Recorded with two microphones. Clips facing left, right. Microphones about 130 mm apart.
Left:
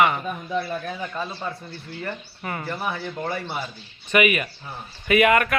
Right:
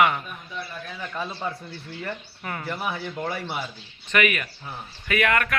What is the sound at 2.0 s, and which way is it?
A man's voice, 5° left (ahead or behind).